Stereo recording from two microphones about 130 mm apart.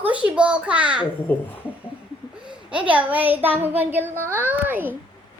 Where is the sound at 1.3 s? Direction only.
10° left (ahead or behind).